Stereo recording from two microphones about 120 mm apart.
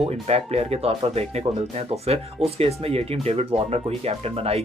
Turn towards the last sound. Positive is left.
turn(degrees=-55)  # may be behind; listen again after turning